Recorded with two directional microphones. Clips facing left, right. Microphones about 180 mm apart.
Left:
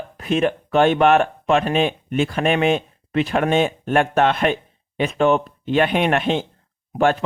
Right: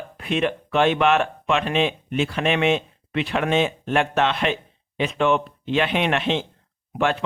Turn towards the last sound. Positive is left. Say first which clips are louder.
# left 5 dB
turn(degrees=45)  # may be behind; listen again after turning